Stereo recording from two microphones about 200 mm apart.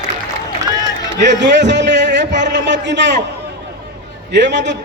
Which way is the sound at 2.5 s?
60° right (ahead or behind).